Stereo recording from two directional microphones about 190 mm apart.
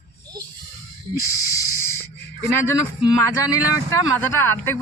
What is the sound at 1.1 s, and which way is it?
Hiss, 15° left (ahead or behind).